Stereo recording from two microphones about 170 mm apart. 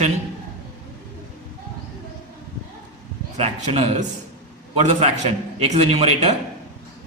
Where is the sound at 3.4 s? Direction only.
40° right (ahead or behind).